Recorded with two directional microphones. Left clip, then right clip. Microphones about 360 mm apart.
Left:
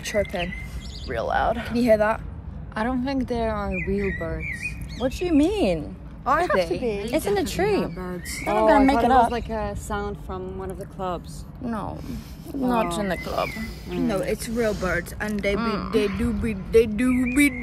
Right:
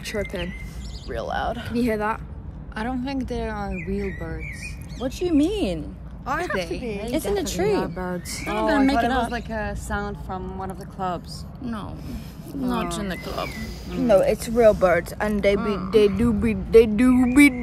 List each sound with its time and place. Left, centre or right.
0.0 s speech: centre
1.1 s speech: centre
1.8 s speech: centre
2.7 s speech: centre
9.3 s speech: centre
11.6 s speech: centre
14.0 s speech: centre